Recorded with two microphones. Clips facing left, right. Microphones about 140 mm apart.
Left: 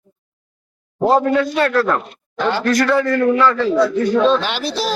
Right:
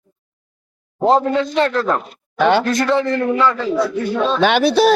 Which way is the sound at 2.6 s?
25° right (ahead or behind).